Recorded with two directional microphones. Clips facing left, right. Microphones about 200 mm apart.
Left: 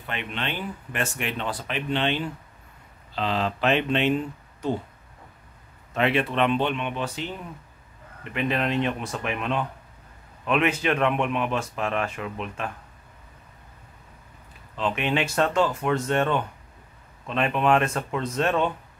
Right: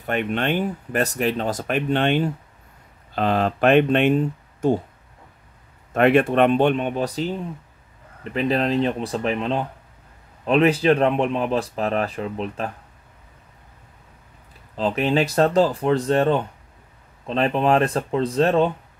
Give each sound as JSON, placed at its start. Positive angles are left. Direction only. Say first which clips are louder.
{"t": 0.0, "sound": "speech", "louder": "right 9 dB", "side_deg": -45}
{"t": 5.9, "sound": "speech", "louder": "right 7 dB", "side_deg": -50}
{"t": 14.8, "sound": "speech", "louder": "right 5 dB", "side_deg": -35}